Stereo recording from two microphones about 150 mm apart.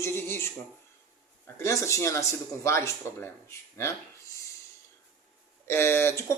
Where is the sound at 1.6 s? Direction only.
20° left (ahead or behind).